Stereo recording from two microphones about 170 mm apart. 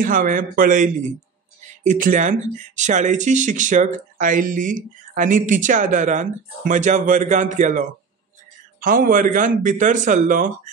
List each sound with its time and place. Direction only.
0.0 s speech: 50° right (ahead or behind)
8.8 s speech: 55° right (ahead or behind)